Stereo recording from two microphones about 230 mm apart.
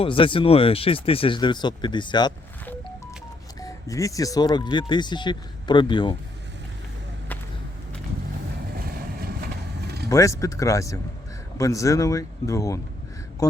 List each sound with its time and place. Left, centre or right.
0.0 s speech: left
3.6 s speech: centre
8.7 s vehicle: right
10.1 s speech: centre